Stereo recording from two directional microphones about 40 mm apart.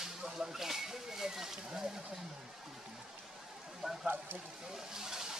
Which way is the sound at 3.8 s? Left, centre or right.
Centre.